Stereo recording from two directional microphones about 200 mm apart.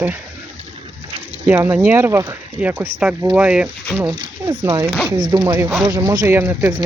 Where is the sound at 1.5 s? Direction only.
10° right (ahead or behind).